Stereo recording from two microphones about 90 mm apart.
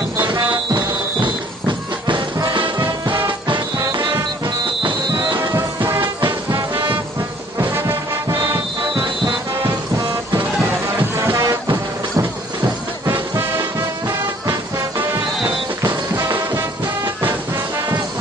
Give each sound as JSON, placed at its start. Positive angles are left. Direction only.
{"t": 0.3, "sound": "music", "side_deg": -60}
{"t": 3.3, "sound": "music", "side_deg": -60}
{"t": 5.5, "sound": "music", "side_deg": -25}
{"t": 5.9, "sound": "music", "side_deg": -60}
{"t": 7.6, "sound": "music", "side_deg": -25}
{"t": 8.9, "sound": "music", "side_deg": -60}
{"t": 11.3, "sound": "music", "side_deg": -35}
{"t": 13.0, "sound": "music", "side_deg": -30}
{"t": 16.2, "sound": "music", "side_deg": -35}